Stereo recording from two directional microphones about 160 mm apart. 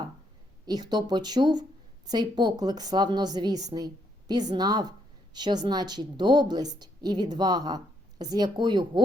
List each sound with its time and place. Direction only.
0.7 s speech: 25° right (ahead or behind)